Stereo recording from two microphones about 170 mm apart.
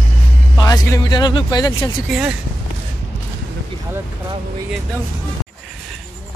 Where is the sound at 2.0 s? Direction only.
5° right (ahead or behind).